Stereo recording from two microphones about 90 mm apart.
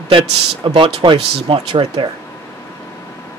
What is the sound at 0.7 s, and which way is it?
Speech, 75° right (ahead or behind).